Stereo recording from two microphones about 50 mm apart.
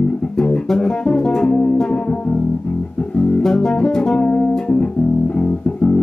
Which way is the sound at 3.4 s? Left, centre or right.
Centre.